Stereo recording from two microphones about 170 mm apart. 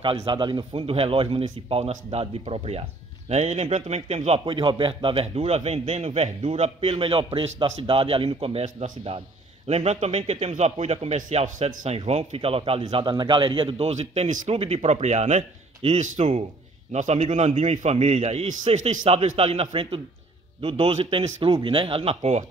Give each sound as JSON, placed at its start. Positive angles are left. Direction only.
{"t": 0.0, "sound": "speech", "side_deg": -30}